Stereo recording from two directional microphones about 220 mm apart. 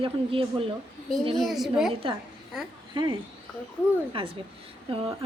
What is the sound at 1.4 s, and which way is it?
Speech, centre (ahead or behind).